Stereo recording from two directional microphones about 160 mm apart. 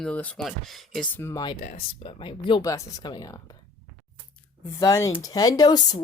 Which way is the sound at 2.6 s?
20° left (ahead or behind).